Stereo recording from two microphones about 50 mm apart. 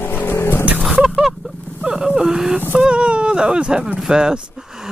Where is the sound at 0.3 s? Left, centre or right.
Left.